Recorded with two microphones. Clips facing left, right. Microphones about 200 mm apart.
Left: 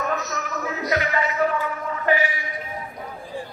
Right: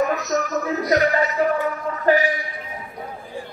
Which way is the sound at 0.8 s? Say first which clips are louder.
Right 4 dB; 40° right (ahead or behind).